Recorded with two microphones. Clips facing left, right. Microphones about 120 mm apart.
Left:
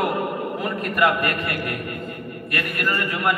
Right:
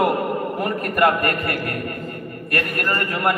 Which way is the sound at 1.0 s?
45° right (ahead or behind).